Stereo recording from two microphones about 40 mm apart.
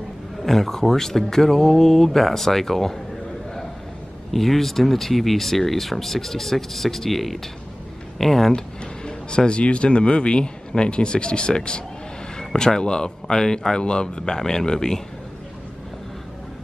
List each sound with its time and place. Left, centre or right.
0.4 s speech: centre
4.3 s speech: centre
8.5 s speech: centre